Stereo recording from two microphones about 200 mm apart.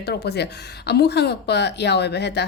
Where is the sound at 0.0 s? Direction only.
55° left (ahead or behind).